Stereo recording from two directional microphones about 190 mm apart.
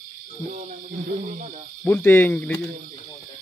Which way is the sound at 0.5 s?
40° right (ahead or behind).